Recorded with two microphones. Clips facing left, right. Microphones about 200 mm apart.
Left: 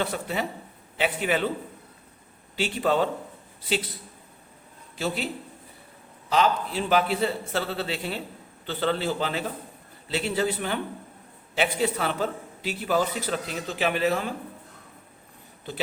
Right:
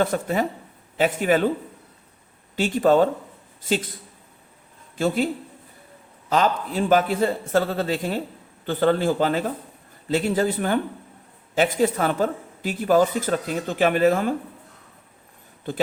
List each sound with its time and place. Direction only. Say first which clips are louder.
0.0 s speech: right 6 dB; 45° right (ahead or behind)
2.6 s speech: right 6 dB; 45° right (ahead or behind)
4.9 s speech: right 7 dB; 50° right (ahead or behind)
6.3 s speech: right 2 dB; 45° right (ahead or behind)
15.7 s speech: right 7 dB; 50° right (ahead or behind)